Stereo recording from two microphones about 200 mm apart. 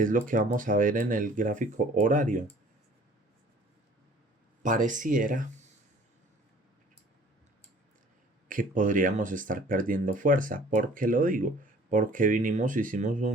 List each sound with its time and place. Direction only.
0.0 s speech: 40° right (ahead or behind)
4.6 s speech: 40° right (ahead or behind)
8.4 s speech: 40° right (ahead or behind)